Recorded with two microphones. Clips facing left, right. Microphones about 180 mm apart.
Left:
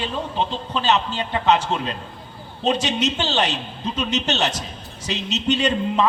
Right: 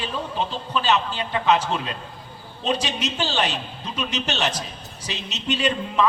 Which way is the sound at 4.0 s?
35° left (ahead or behind).